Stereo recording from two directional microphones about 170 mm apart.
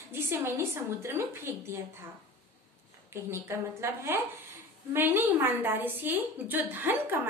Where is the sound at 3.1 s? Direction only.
15° right (ahead or behind).